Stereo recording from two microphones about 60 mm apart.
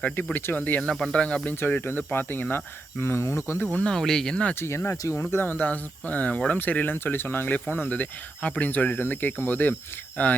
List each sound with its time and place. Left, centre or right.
0.3 s speech: left
0.8 s speech: centre
1.6 s speech: left
3.8 s speech: centre
4.6 s speech: left
5.4 s speech: left